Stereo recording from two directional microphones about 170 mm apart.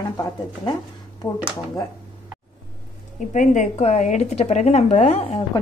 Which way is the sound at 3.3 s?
45° left (ahead or behind).